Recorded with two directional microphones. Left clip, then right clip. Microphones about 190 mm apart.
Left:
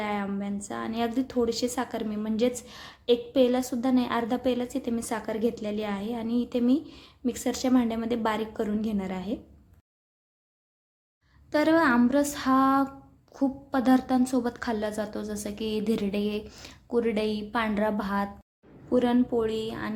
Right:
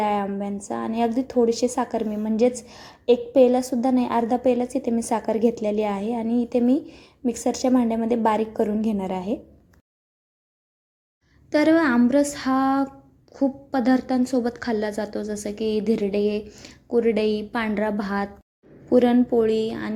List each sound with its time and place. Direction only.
0.0 s a woman's voice: 10° right (ahead or behind)
11.4 s a woman's voice: 15° right (ahead or behind)